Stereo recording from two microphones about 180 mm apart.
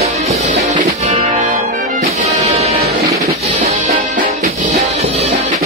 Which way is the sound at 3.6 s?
45° right (ahead or behind).